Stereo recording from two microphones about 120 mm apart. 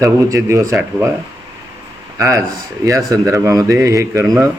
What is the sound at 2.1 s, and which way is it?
Speech, 25° right (ahead or behind).